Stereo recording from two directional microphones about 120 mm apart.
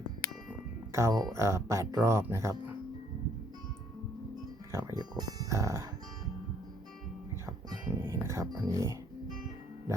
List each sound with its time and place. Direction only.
0.9 s speech: 25° right (ahead or behind)
4.7 s speech: 25° right (ahead or behind)
7.9 s speech: 20° right (ahead or behind)